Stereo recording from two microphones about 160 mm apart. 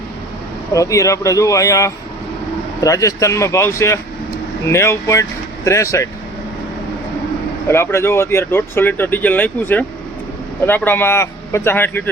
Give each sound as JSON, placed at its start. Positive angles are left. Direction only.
{"t": 0.7, "sound": "speech", "side_deg": 20}
{"t": 7.7, "sound": "speech", "side_deg": 15}